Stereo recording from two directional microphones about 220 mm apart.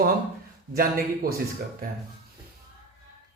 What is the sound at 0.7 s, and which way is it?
Speech, 40° right (ahead or behind).